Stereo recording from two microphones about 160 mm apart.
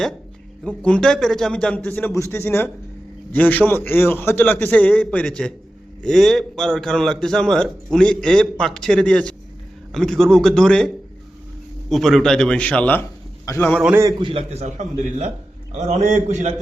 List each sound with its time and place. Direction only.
0.8 s a man's voice: 5° left (ahead or behind)
13.7 s a man's voice: 10° right (ahead or behind)
14.3 s a man's voice: 40° right (ahead or behind)